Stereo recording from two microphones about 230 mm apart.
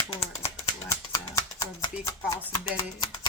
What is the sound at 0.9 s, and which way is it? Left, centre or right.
Music, centre.